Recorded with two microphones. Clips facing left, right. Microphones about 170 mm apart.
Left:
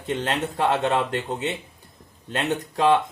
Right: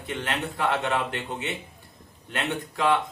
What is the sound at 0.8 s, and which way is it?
Speech, 40° left (ahead or behind).